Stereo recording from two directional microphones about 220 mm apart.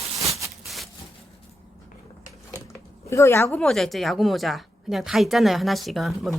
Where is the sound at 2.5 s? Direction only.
15° left (ahead or behind).